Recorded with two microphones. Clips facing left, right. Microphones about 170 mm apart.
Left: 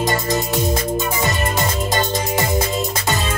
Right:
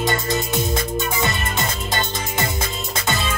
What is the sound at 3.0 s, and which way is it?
Music, 40° left (ahead or behind).